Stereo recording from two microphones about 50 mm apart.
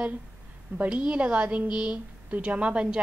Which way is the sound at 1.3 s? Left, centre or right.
Right.